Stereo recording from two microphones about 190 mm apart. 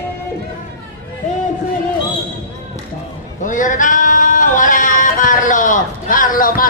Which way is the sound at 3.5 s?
45° left (ahead or behind).